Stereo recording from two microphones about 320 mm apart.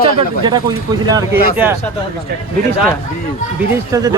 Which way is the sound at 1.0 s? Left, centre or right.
Centre.